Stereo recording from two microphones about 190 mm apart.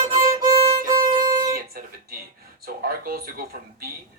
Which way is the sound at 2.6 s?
55° right (ahead or behind).